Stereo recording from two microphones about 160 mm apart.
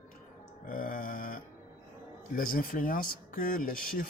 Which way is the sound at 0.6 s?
60° left (ahead or behind).